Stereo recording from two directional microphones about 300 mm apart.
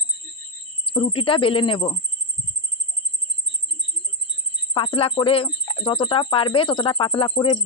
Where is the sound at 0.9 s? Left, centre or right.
Centre.